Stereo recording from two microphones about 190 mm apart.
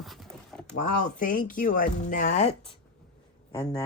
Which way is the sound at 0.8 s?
45° left (ahead or behind).